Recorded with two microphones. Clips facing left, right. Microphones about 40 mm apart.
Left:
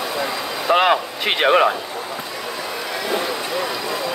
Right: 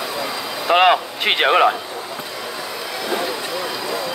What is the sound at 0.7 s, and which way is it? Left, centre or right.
Speech, right.